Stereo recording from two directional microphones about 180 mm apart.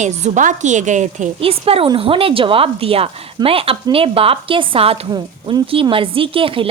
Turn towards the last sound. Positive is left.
turn(degrees=-30)  # may be behind; listen again after turning